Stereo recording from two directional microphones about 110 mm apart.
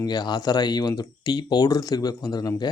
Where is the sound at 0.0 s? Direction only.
40° left (ahead or behind).